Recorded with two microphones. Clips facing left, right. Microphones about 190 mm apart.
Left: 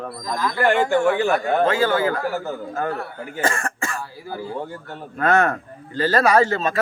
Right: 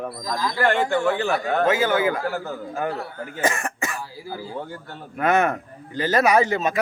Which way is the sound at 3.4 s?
15° right (ahead or behind).